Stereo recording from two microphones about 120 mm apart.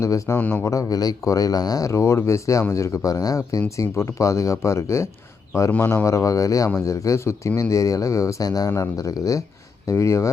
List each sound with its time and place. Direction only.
0.0 s speech: 25° left (ahead or behind)
0.3 s speech: 15° left (ahead or behind)
0.6 s speech: 25° left (ahead or behind)